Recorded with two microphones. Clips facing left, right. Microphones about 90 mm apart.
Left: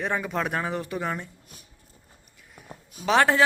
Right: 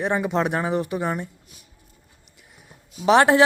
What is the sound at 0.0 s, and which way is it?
A man's voice, 20° right (ahead or behind).